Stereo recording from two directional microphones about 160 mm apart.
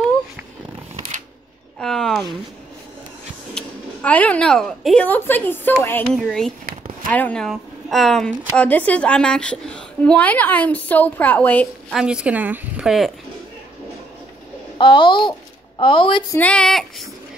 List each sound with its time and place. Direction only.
1.8 s a sound: 5° left (ahead or behind)
3.5 s a woman's voice: 10° left (ahead or behind)
6.0 s a woman's voice: 5° left (ahead or behind)
11.9 s a woman's voice: 5° right (ahead or behind)
14.8 s a child's voice: 30° left (ahead or behind)
16.3 s a woman's voice: 10° left (ahead or behind)